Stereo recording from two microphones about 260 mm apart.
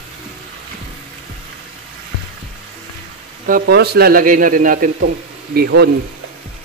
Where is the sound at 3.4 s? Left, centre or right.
Right.